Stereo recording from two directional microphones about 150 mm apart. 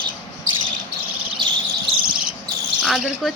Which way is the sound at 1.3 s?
35° right (ahead or behind).